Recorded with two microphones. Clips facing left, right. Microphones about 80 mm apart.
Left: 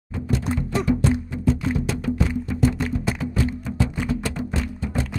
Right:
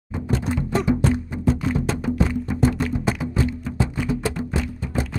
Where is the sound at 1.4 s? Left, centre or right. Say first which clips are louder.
Right 2 dB; right.